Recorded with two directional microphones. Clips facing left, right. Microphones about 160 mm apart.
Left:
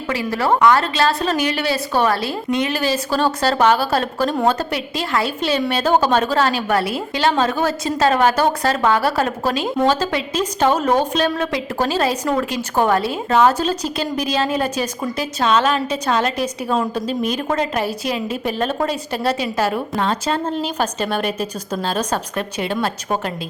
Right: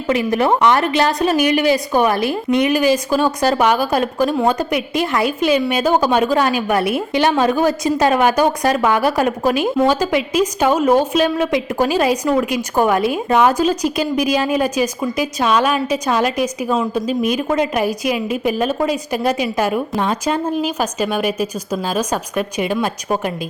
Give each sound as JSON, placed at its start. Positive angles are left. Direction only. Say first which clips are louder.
{"t": 0.1, "sound": "a woman's voice", "louder": "right 3 dB", "side_deg": -20}